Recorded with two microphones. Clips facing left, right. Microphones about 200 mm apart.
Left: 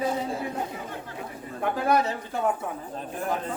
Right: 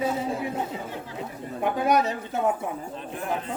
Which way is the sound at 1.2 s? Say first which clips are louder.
Right 3 dB; 20° right (ahead or behind).